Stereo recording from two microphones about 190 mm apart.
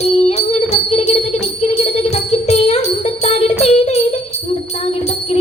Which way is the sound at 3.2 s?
30° left (ahead or behind).